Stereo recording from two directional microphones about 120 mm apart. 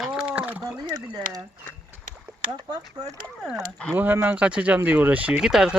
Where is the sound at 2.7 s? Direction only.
30° right (ahead or behind).